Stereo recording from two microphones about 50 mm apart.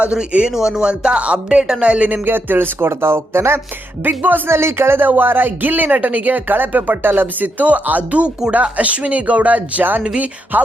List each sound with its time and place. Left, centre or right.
0.0 s speech: right
2.2 s speech: right
4.0 s speech: right
4.4 s speech: right